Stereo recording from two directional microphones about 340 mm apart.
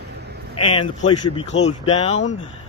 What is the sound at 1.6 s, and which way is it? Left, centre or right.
Speech, centre.